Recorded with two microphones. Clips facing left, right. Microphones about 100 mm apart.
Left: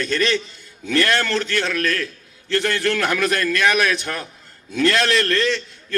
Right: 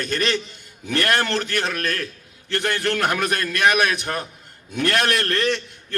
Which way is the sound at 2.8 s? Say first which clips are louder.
Left 2 dB; 30° right (ahead or behind).